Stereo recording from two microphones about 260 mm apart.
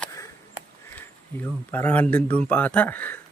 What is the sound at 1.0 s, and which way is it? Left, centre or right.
Speech, centre.